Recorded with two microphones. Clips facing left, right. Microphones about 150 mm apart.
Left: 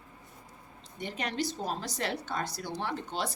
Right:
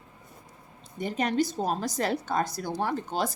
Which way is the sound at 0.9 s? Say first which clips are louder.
Right 7 dB; 45° right (ahead or behind).